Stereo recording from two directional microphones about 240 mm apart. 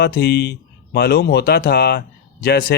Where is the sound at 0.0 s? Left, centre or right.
Left.